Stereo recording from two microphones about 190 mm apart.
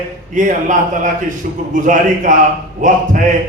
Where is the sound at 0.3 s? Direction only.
45° right (ahead or behind).